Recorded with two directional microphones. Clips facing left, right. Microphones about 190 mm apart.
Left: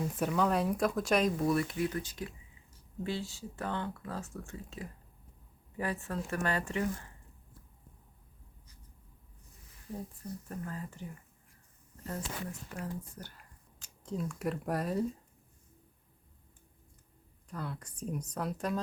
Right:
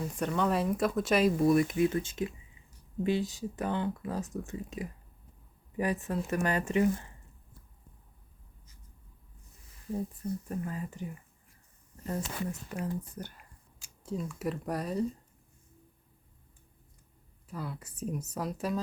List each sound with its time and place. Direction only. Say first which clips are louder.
0.2 s speech: right 1 dB; 5° left (ahead or behind); by 1.7 s 15° right (ahead or behind)
1.8 s speech: right 6 dB; 25° right (ahead or behind)
10.5 s speech: right 5 dB; 15° right (ahead or behind)
13.7 s speech: right 1 dB; 10° right (ahead or behind)
17.5 s speech: right 1 dB; 5° right (ahead or behind)